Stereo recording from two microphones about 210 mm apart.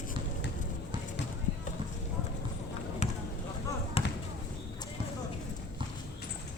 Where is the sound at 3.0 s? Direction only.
35° left (ahead or behind).